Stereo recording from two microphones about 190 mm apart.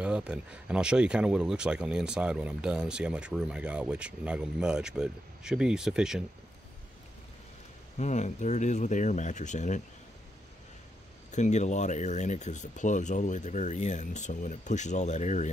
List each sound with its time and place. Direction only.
0.0 s speech: 5° right (ahead or behind)
8.0 s speech: 40° left (ahead or behind)
11.3 s speech: 40° left (ahead or behind)